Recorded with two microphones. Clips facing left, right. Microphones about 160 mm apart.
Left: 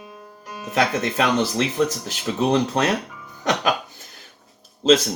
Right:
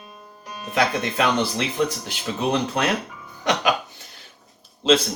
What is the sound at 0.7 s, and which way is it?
Speech, 40° left (ahead or behind).